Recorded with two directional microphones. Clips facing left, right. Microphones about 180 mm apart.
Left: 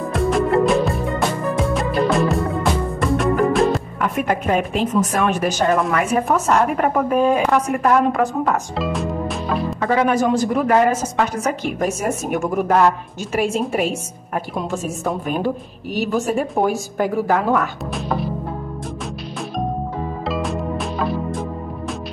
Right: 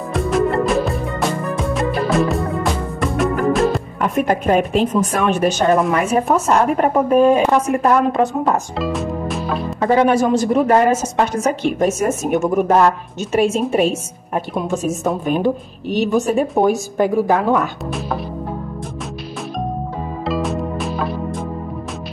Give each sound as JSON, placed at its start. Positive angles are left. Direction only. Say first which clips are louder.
{"t": 0.1, "sound": "music", "louder": "even", "side_deg": 0}
{"t": 4.0, "sound": "a woman's voice", "louder": "right 5 dB", "side_deg": -35}
{"t": 8.7, "sound": "music", "louder": "right 1 dB", "side_deg": 0}
{"t": 9.8, "sound": "a woman's voice", "louder": "right 4 dB", "side_deg": -30}
{"t": 17.9, "sound": "music", "louder": "left 3 dB", "side_deg": 0}
{"t": 20.2, "sound": "music", "louder": "right 3 dB", "side_deg": 0}